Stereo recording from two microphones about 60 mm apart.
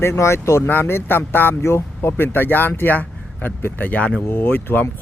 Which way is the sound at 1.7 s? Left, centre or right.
Left.